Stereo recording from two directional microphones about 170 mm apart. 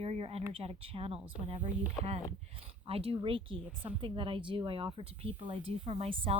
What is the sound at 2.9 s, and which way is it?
Speech, 35° right (ahead or behind).